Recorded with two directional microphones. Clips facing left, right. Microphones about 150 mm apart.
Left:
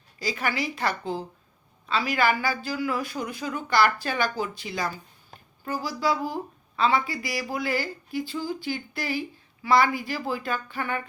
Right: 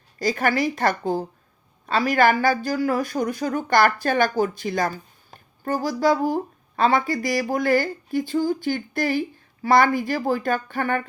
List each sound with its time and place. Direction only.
0.2 s a woman's voice: 50° right (ahead or behind)